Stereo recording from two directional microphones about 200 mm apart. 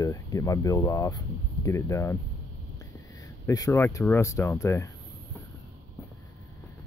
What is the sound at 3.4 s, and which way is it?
Speech, 15° left (ahead or behind).